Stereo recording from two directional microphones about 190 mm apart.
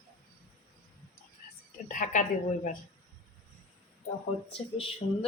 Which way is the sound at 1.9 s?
45° left (ahead or behind).